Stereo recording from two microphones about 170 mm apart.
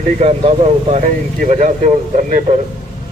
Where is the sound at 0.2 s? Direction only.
35° right (ahead or behind).